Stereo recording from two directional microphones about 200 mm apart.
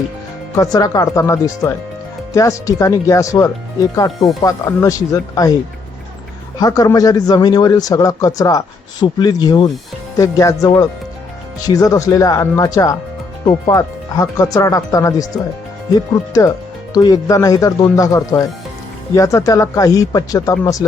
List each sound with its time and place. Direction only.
0.5 s speech: 20° left (ahead or behind)
6.6 s speech: 20° left (ahead or behind)
16.3 s speech: 15° left (ahead or behind)